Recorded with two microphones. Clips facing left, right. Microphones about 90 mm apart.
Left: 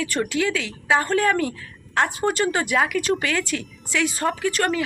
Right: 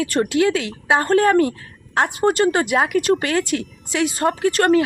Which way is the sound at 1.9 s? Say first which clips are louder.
Right 4 dB; 35° right (ahead or behind).